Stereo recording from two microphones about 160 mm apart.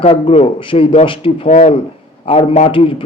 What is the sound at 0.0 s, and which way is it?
A man's voice, 35° left (ahead or behind).